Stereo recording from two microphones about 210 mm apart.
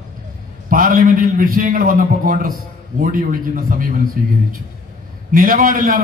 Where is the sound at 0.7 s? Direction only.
40° right (ahead or behind).